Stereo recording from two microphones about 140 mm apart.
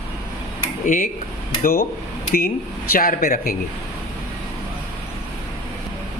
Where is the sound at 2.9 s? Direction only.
90° left.